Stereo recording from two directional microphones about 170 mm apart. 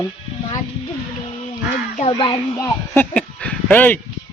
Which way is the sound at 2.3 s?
25° left (ahead or behind).